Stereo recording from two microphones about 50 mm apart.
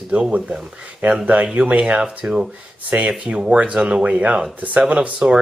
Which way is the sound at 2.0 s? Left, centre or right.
Centre.